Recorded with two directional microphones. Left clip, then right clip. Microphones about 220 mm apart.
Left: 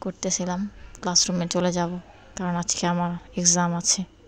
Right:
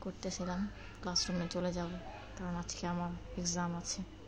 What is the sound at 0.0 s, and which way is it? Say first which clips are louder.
A woman's voice: left 13 dB; 40° left (ahead or behind).